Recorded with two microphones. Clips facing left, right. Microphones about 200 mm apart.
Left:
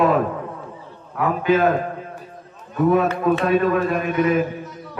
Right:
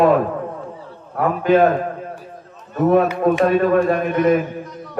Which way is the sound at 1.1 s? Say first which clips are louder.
Right 3 dB; 40° right (ahead or behind).